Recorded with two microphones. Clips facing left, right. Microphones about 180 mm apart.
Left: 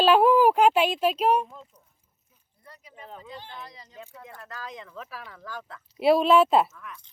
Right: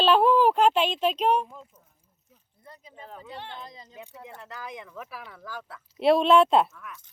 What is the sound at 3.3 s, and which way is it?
Speech, 65° right (ahead or behind).